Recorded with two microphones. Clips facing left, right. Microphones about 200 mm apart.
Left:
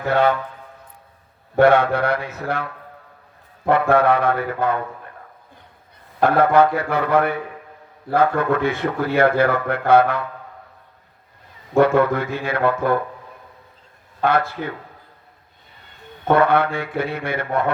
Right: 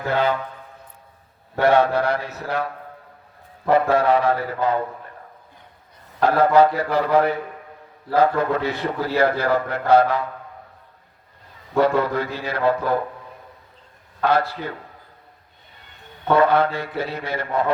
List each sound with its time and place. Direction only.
1.5 s a man's voice: 55° left (ahead or behind)
3.7 s a man's voice: 60° left (ahead or behind)
6.2 s a man's voice: 55° left (ahead or behind)
11.7 s a man's voice: 50° left (ahead or behind)
14.3 s a man's voice: 55° left (ahead or behind)
16.2 s a man's voice: 55° left (ahead or behind)